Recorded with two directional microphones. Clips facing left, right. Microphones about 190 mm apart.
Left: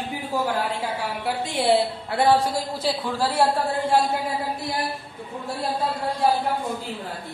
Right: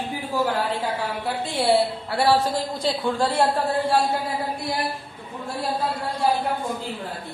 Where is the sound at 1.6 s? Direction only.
20° left (ahead or behind).